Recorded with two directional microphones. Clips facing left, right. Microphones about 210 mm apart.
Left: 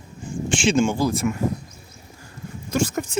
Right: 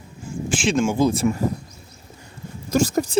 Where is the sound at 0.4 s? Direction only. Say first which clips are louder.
Left 1 dB; centre (ahead or behind).